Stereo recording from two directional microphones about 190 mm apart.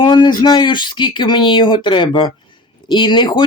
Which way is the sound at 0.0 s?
25° left (ahead or behind).